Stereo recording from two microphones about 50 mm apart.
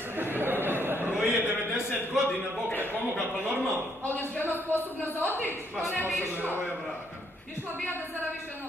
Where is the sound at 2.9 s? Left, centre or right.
Right.